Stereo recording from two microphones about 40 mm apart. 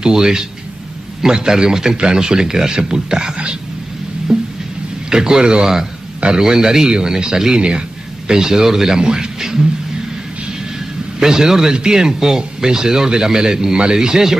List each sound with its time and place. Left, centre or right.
0.0 s a man's voice: centre
4.3 s music: centre
5.1 s a man's voice: centre
11.1 s a man's voice: centre